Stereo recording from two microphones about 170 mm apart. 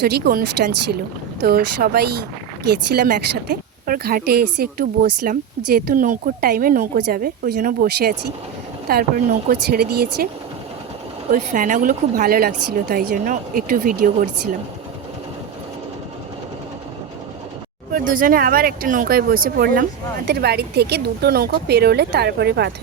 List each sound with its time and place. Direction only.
0.0 s a woman's voice: 65° right (ahead or behind)
11.3 s a woman's voice: 50° right (ahead or behind)
17.9 s a woman's voice: 55° right (ahead or behind)
20.2 s speech: 70° right (ahead or behind)